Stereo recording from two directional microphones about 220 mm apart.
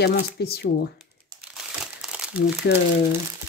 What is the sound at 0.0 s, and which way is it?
Speech, 45° left (ahead or behind).